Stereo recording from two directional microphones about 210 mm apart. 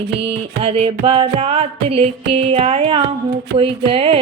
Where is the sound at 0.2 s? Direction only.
25° right (ahead or behind).